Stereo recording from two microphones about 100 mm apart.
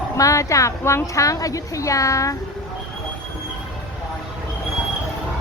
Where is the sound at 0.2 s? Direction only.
30° left (ahead or behind).